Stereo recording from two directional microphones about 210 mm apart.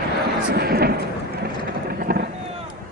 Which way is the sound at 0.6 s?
50° right (ahead or behind).